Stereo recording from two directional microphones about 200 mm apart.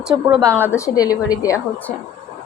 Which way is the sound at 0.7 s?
15° left (ahead or behind).